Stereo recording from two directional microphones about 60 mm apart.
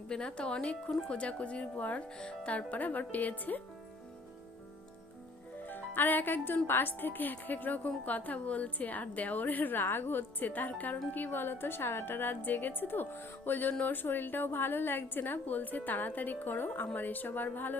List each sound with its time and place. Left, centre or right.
0.1 s a woman's voice: centre
5.6 s a woman's voice: left